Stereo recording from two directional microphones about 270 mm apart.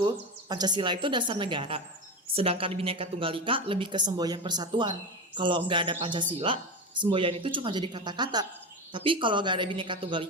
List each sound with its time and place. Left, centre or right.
0.0 s a woman's voice: centre